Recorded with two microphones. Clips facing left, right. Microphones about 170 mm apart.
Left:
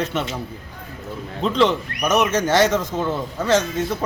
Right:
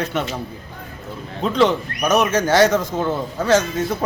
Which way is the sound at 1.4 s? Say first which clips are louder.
Right 1 dB; 5° right (ahead or behind).